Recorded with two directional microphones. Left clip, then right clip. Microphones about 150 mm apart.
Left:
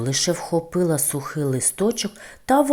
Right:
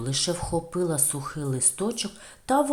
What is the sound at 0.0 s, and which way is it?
Speech, 25° left (ahead or behind).